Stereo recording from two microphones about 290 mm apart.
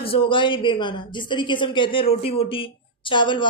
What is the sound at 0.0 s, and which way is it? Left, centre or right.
A woman's voice, centre.